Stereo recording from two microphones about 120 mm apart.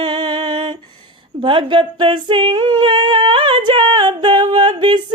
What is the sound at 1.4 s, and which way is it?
Singing, 45° right (ahead or behind).